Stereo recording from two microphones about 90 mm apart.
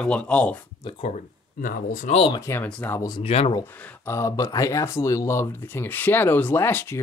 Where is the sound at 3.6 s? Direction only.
20° left (ahead or behind).